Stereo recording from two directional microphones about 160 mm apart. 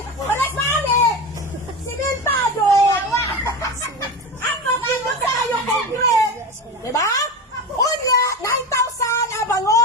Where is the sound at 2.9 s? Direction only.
20° left (ahead or behind).